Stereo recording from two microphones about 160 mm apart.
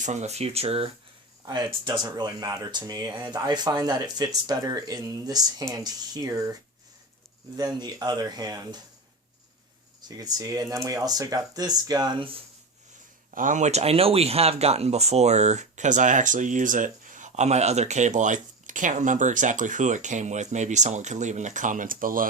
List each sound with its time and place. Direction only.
0.0 s speech: 45° right (ahead or behind)
1.5 s speech: 25° right (ahead or behind)
10.1 s speech: 25° right (ahead or behind)
13.3 s speech: 55° right (ahead or behind)